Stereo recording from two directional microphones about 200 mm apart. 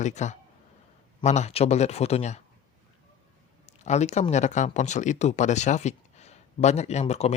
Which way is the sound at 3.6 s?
35° left (ahead or behind).